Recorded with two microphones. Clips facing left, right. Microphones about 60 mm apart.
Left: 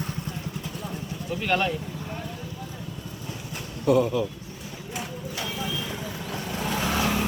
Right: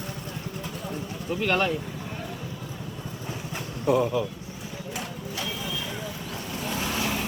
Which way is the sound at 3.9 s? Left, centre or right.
Right.